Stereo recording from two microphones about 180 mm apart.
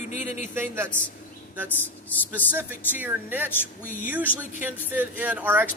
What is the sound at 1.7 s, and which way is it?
Speech, 10° left (ahead or behind).